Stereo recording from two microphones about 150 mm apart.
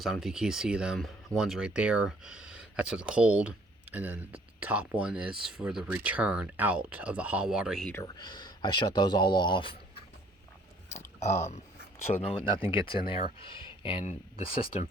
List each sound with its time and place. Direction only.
0.0 s speech: centre (ahead or behind)
8.0 s speech: 30° left (ahead or behind)
12.1 s speech: 40° left (ahead or behind)
13.4 s a sound: 35° left (ahead or behind)
14.0 s speech: 50° left (ahead or behind)